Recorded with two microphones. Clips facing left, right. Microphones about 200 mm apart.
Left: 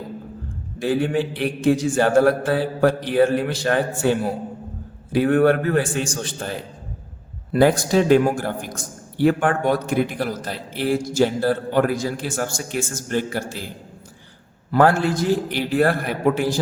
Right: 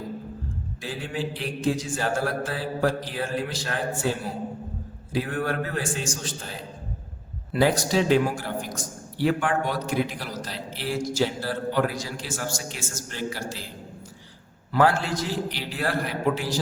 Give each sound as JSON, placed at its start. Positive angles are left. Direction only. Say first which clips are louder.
{"t": 0.8, "sound": "mantra", "louder": "left 11 dB", "side_deg": 60}
{"t": 7.5, "sound": "a man's voice", "louder": "left 5 dB", "side_deg": 55}
{"t": 14.7, "sound": "a man's voice", "louder": "left 5 dB", "side_deg": 50}